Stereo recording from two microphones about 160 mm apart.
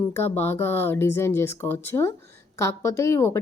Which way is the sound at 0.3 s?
15° left (ahead or behind).